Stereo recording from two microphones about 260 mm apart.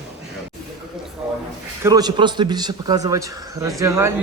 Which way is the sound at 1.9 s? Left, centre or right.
Centre.